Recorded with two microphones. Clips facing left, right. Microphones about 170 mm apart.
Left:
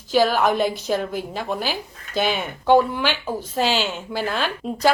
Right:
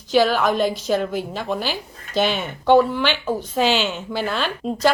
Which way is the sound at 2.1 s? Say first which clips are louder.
Right 2 dB; 5° left (ahead or behind).